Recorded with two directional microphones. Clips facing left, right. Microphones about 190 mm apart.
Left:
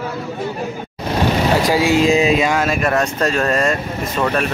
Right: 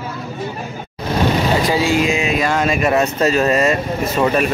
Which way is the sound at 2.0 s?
35° left (ahead or behind).